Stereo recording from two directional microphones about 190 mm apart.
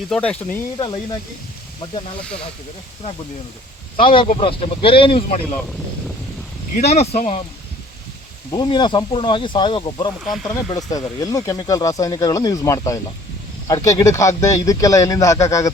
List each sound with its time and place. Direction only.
0.1 s speech: 5° left (ahead or behind)
1.8 s speech: 30° left (ahead or behind)
3.9 s speech: 25° left (ahead or behind)
6.7 s speech: 35° left (ahead or behind)
8.4 s speech: 25° left (ahead or behind)
10.2 s speech: centre (ahead or behind)
10.5 s speech: 20° left (ahead or behind)